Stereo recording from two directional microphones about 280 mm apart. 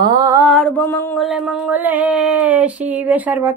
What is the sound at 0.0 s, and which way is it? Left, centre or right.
Mantra, centre.